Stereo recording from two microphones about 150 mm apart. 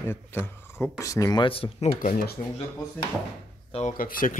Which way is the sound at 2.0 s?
60° left (ahead or behind).